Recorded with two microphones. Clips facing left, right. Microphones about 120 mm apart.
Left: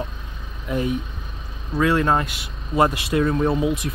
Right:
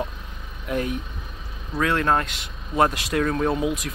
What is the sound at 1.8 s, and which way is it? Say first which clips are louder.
Speech: left 3 dB; 5° left (ahead or behind).